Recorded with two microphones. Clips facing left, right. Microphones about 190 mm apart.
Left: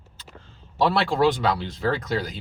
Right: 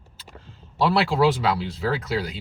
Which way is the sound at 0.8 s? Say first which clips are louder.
Even; 5° right (ahead or behind).